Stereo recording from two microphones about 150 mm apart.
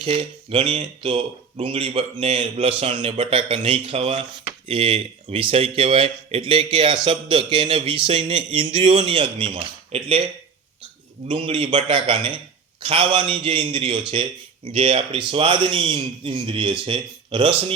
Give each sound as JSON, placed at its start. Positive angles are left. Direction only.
{"t": 0.0, "sound": "speech", "side_deg": -35}
{"t": 11.3, "sound": "speech", "side_deg": -35}